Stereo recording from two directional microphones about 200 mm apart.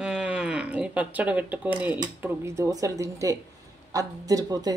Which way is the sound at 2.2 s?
15° right (ahead or behind).